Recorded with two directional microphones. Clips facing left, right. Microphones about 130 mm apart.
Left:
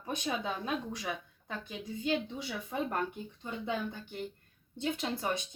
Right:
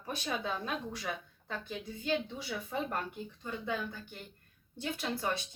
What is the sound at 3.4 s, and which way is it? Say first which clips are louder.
Speech: left 2 dB; 25° left (ahead or behind).